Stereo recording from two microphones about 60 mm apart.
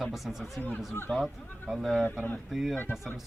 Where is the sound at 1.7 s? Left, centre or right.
Centre.